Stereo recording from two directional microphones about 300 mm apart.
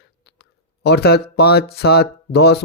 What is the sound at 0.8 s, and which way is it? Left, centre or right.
Speech, left.